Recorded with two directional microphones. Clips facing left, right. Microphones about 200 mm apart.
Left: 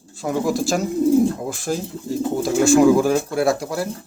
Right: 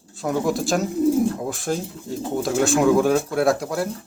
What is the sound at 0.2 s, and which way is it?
Speech, centre (ahead or behind).